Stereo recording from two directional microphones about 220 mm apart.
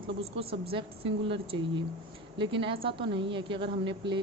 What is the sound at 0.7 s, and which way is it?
A woman's voice, 25° right (ahead or behind).